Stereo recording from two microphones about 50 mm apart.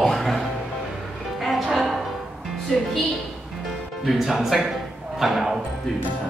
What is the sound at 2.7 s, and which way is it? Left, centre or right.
Speech, centre.